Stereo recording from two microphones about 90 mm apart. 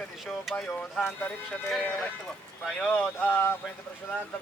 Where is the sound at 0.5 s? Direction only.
10° left (ahead or behind).